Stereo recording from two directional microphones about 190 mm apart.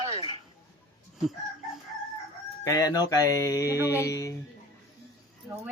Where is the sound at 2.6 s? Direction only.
20° left (ahead or behind).